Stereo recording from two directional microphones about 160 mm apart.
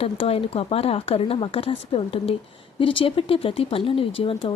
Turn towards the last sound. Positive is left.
turn(degrees=35)  # may be behind; listen again after turning